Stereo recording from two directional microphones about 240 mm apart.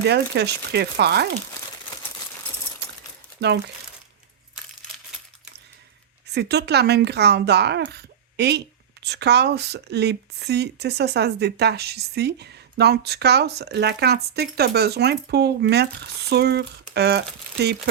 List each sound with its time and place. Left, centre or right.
0.1 s speech: right
3.4 s speech: right
6.2 s speech: right